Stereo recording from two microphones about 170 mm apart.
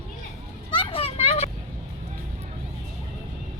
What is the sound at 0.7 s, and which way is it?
Vehicle, 30° left (ahead or behind).